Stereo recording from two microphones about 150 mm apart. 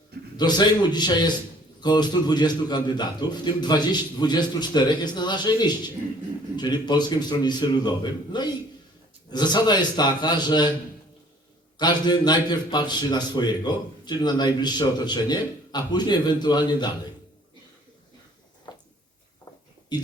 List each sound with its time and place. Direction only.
0.3 s a man's voice: 30° left (ahead or behind)
11.8 s a man's voice: 30° left (ahead or behind)
19.9 s speech: 30° left (ahead or behind)